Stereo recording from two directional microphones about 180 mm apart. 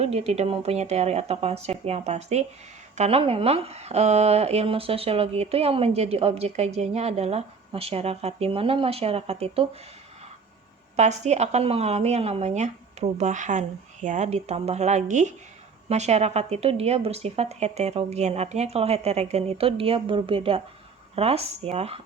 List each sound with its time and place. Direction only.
0.0 s speech: 35° right (ahead or behind)
10.9 s speech: 40° right (ahead or behind)